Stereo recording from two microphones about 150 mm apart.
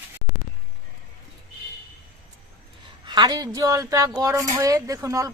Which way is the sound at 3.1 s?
30° right (ahead or behind).